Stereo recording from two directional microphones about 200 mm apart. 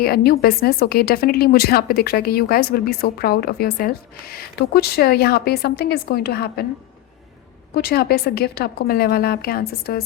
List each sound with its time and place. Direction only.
0.0 s a woman's voice: 50° left (ahead or behind)
7.7 s a woman's voice: 50° left (ahead or behind)